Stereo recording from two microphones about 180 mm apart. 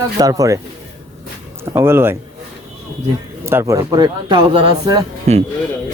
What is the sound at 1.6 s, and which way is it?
Speech, 15° right (ahead or behind).